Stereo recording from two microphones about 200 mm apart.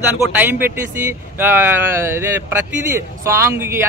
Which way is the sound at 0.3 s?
10° right (ahead or behind).